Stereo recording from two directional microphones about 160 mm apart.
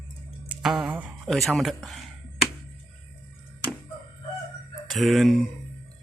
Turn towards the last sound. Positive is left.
turn(degrees=0)  # may be behind; listen again after turning